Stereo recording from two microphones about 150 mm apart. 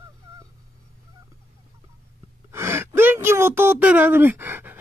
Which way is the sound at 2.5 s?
15° right (ahead or behind).